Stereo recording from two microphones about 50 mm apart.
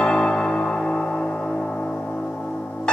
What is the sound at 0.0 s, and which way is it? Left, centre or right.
Music, centre.